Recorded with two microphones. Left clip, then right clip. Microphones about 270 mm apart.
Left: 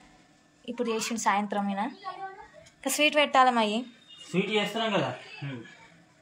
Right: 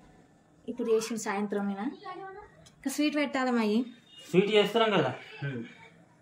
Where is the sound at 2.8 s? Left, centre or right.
Centre.